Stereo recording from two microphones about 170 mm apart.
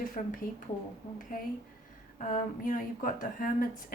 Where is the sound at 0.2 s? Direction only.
50° left (ahead or behind).